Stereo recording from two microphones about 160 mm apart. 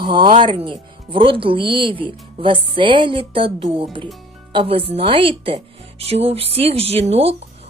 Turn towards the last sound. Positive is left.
turn(degrees=-40)  # may be behind; listen again after turning